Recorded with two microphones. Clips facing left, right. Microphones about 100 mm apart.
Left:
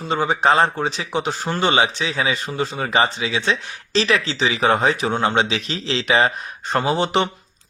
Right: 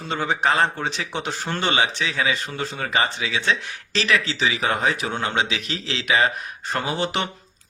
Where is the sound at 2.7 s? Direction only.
30° left (ahead or behind).